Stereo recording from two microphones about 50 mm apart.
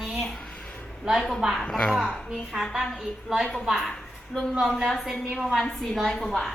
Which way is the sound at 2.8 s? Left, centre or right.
Centre.